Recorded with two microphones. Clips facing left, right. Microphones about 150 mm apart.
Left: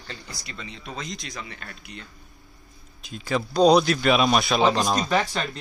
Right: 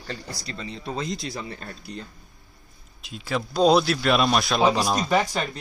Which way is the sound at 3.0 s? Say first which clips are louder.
Left 2 dB; centre (ahead or behind).